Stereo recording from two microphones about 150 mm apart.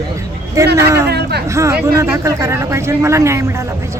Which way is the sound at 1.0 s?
90° right.